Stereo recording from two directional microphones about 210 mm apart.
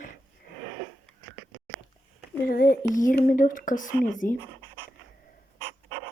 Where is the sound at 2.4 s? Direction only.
45° left (ahead or behind).